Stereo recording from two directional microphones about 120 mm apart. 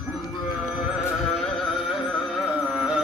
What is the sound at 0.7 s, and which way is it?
Music, 5° right (ahead or behind).